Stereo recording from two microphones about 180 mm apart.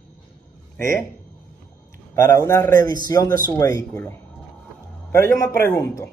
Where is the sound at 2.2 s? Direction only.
15° left (ahead or behind).